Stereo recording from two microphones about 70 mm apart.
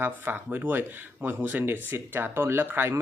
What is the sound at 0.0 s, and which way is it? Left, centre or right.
Speech, right.